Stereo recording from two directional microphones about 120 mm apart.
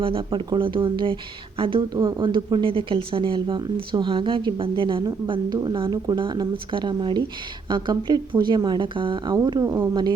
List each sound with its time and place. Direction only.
0.0 s speech: 50° right (ahead or behind); by 9.7 s 35° right (ahead or behind)